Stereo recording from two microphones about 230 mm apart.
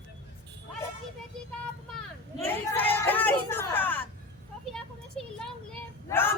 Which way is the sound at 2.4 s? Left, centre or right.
Centre.